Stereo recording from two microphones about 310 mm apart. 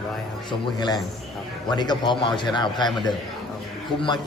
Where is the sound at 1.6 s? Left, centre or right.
Centre.